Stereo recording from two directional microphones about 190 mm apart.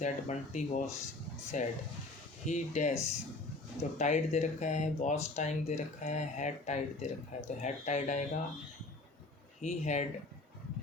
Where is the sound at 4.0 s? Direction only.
40° left (ahead or behind).